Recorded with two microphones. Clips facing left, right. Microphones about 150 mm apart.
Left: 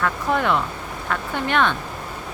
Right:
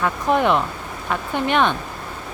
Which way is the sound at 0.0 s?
20° right (ahead or behind).